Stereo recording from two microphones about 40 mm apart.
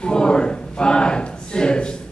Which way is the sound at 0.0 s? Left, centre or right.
Left.